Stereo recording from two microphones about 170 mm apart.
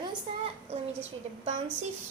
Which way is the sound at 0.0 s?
35° right (ahead or behind).